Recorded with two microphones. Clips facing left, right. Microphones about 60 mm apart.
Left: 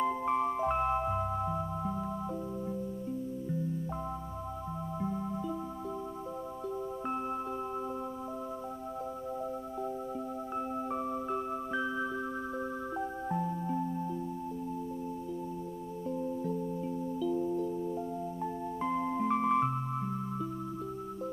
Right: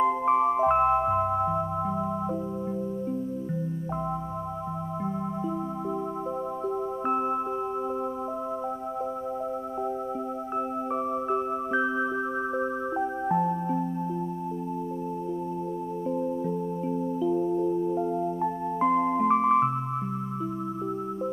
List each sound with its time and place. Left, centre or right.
0.0 s music: right
7.1 s music: right
10.9 s music: right
16.1 s music: right